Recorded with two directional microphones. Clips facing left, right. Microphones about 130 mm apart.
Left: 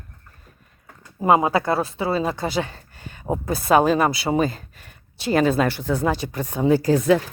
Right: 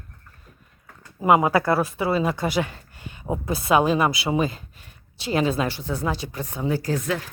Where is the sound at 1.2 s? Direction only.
30° left (ahead or behind); by 6.9 s 90° left.